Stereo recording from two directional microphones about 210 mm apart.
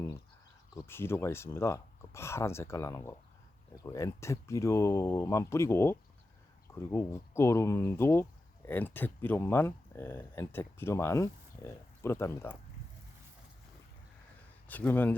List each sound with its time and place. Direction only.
0.8 s speech: 10° left (ahead or behind)
14.7 s speech: 10° left (ahead or behind)